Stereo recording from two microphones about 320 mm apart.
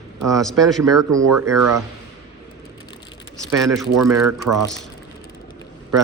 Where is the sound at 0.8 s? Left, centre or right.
Right.